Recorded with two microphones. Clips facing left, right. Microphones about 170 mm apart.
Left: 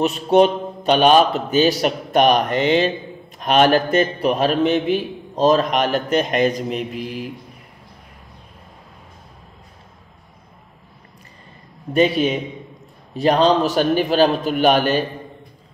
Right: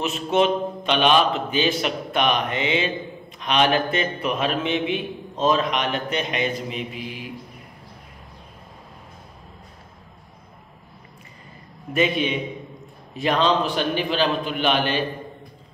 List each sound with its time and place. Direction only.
0.0 s a man's voice: 35° left (ahead or behind)
4.7 s a man's voice: centre (ahead or behind)
5.3 s a man's voice: 40° left (ahead or behind)
11.9 s a man's voice: 35° left (ahead or behind)